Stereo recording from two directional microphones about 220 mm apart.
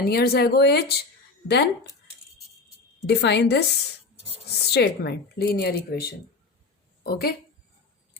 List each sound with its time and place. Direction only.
0.0 s speech: 45° left (ahead or behind)
3.1 s a woman's voice: 50° left (ahead or behind)